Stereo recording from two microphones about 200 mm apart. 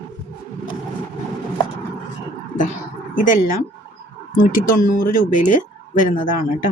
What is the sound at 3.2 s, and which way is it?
Speech, 45° left (ahead or behind).